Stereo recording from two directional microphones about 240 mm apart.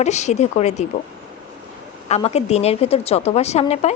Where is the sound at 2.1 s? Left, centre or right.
Left.